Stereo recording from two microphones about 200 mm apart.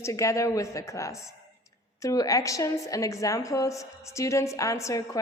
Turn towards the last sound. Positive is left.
turn(degrees=15)  # may be behind; listen again after turning